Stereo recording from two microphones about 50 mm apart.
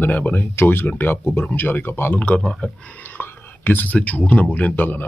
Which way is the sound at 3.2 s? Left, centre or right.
Left.